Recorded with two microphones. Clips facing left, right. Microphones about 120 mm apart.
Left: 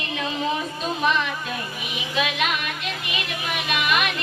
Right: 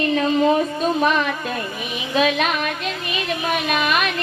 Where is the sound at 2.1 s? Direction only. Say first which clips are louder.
Right 6 dB; 40° right (ahead or behind).